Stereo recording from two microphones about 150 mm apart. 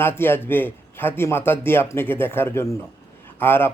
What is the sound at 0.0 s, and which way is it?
Speech, 15° left (ahead or behind).